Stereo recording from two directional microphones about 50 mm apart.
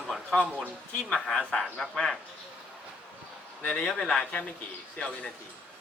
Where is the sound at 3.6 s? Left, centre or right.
Left.